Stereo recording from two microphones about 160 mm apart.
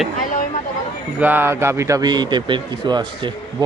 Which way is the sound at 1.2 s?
10° right (ahead or behind).